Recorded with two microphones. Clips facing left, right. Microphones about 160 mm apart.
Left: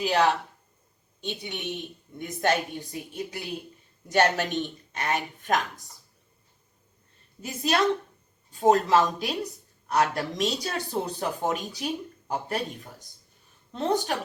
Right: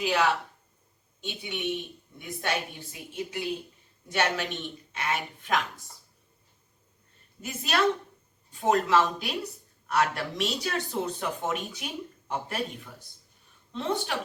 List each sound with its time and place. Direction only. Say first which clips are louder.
0.0 s speech: left 3 dB; 35° left (ahead or behind)
1.3 s speech: right 1 dB; 40° left (ahead or behind)
7.4 s speech: left 2 dB; 30° left (ahead or behind)